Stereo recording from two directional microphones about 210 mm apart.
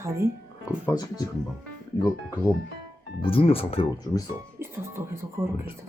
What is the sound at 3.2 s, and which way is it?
Speech, 25° left (ahead or behind).